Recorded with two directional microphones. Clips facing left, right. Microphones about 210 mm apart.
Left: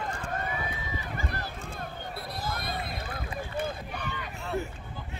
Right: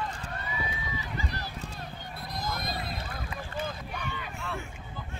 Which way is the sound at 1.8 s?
55° left (ahead or behind).